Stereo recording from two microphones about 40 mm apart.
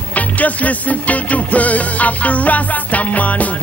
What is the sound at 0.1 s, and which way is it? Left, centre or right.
Music, left.